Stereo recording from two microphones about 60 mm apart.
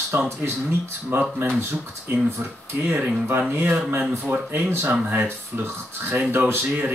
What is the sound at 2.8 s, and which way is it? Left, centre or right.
Speech, right.